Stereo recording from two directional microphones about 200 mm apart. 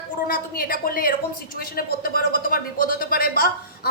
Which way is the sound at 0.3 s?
45° left (ahead or behind).